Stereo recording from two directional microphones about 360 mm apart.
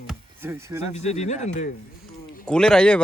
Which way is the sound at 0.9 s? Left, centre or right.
Centre.